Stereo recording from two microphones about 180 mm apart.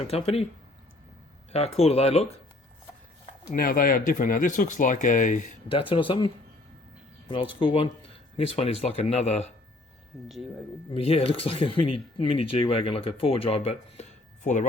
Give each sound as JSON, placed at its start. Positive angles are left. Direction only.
{"t": 0.1, "sound": "speech", "side_deg": 35}
{"t": 1.5, "sound": "speech", "side_deg": 35}
{"t": 3.5, "sound": "speech", "side_deg": 50}
{"t": 5.6, "sound": "speech", "side_deg": 30}
{"t": 10.9, "sound": "speech", "side_deg": 35}